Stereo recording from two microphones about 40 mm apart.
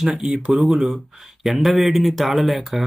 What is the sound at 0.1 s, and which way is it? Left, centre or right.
Speech, right.